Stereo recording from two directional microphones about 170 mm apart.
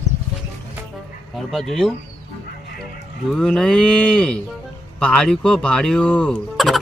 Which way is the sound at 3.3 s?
Centre (ahead or behind).